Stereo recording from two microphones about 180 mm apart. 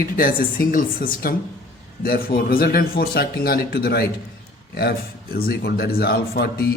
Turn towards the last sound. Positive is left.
turn(degrees=60)  # may be behind; listen again after turning